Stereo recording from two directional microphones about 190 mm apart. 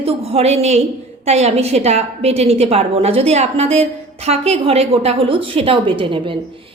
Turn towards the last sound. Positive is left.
turn(degrees=-25)  # may be behind; listen again after turning